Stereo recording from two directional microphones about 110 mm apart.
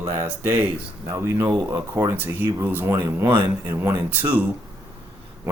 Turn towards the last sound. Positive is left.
turn(degrees=-20)  # may be behind; listen again after turning